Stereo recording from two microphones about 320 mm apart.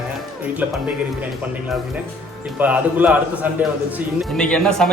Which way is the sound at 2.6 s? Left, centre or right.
Centre.